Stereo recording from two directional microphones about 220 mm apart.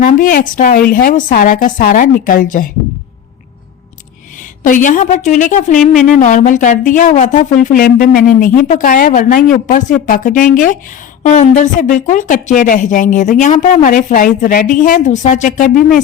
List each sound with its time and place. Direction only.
0.0 s speech: 40° left (ahead or behind)
4.6 s speech: 35° left (ahead or behind)